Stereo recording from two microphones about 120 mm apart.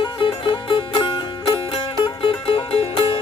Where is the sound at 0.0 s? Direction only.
45° left (ahead or behind).